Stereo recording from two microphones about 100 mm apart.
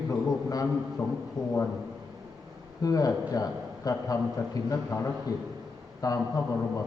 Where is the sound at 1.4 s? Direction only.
40° left (ahead or behind).